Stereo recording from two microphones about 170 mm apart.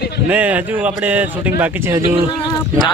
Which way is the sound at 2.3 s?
25° left (ahead or behind).